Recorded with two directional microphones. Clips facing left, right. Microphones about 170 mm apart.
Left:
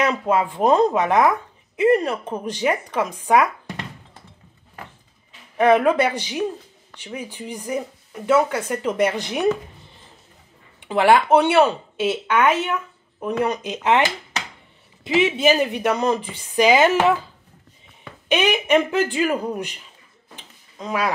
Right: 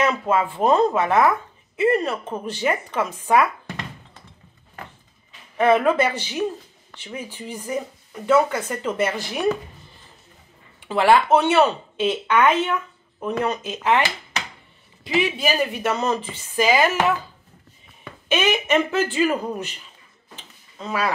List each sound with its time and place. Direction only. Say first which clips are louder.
0.0 s speech: left 1 dB; 10° left (ahead or behind)
5.6 s speech: left 1 dB; 10° left (ahead or behind)
15.0 s a woman's voice: left 4 dB; 20° left (ahead or behind)
18.3 s speech: left 2 dB; 15° left (ahead or behind)
20.3 s a sound: left 1 dB; 15° left (ahead or behind)